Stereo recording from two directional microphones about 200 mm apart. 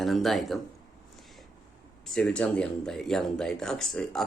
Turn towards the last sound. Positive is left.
turn(degrees=5)  # may be behind; listen again after turning